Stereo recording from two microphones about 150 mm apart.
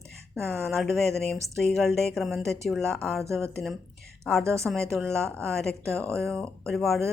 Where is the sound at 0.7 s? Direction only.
Centre (ahead or behind).